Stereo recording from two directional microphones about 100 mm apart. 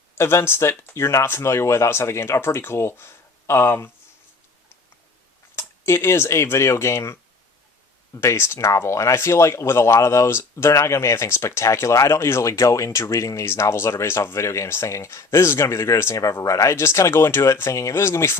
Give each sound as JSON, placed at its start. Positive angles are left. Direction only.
{"t": 0.2, "sound": "speech", "side_deg": 25}
{"t": 5.5, "sound": "speech", "side_deg": 25}